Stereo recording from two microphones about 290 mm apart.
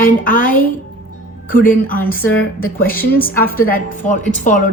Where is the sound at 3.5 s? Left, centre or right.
Left.